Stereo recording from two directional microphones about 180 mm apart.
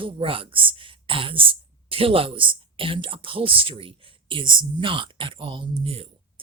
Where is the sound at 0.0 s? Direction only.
30° right (ahead or behind).